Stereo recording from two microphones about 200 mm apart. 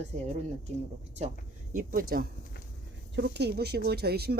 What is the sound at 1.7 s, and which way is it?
Speech, 45° right (ahead or behind).